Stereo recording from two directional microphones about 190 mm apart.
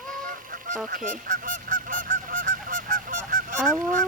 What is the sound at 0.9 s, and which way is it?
Goose, 45° right (ahead or behind).